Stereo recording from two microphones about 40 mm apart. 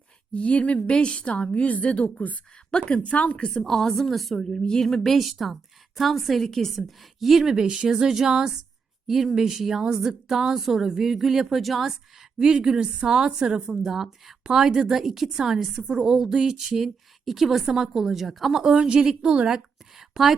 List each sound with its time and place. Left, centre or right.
0.3 s a woman's voice: left
2.6 s speech: left
3.0 s a woman's voice: left
3.5 s a woman's voice: centre
4.4 s a woman's voice: centre
4.8 s a woman's voice: centre
7.5 s a woman's voice: centre
12.4 s a woman's voice: right
13.8 s a woman's voice: centre
18.7 s a woman's voice: right
19.5 s a sound: centre